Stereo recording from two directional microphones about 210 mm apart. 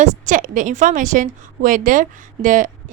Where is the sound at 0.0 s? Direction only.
40° right (ahead or behind).